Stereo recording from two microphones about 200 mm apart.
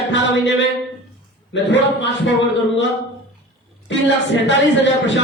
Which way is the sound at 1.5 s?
65° left (ahead or behind).